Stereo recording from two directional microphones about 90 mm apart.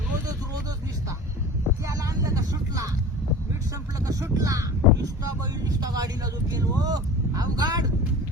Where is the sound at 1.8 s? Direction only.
40° right (ahead or behind).